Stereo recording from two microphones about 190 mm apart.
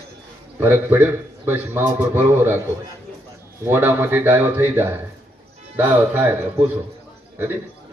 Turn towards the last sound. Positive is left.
turn(degrees=-10)  # may be behind; listen again after turning